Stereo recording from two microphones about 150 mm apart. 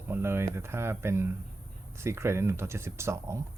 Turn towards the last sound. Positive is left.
turn(degrees=-20)  # may be behind; listen again after turning